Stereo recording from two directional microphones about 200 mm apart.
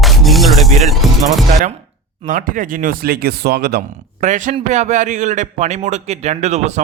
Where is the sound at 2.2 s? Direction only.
40° right (ahead or behind).